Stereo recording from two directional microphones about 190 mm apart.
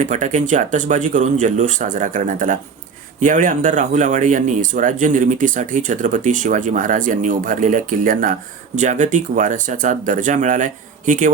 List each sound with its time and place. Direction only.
0.0 s speech: 40° right (ahead or behind)